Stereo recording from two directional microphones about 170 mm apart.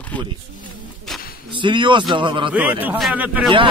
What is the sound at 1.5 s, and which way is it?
Speech, 30° right (ahead or behind).